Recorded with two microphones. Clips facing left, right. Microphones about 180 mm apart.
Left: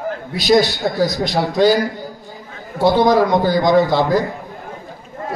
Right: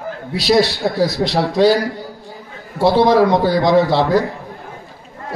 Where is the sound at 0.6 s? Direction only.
30° right (ahead or behind).